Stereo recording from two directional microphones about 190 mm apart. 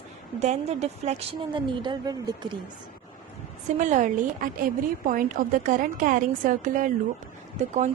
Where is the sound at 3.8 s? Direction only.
40° right (ahead or behind).